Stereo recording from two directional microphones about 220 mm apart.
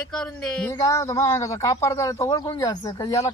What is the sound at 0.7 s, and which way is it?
A man's voice, 15° left (ahead or behind).